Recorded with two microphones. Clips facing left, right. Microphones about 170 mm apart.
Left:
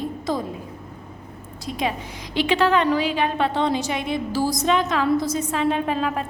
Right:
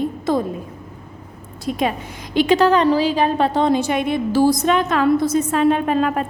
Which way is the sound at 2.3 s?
40° right (ahead or behind).